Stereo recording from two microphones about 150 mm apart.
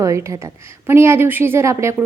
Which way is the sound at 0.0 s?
20° right (ahead or behind).